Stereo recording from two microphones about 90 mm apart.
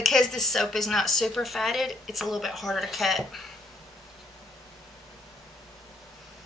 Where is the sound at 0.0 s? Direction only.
5° left (ahead or behind).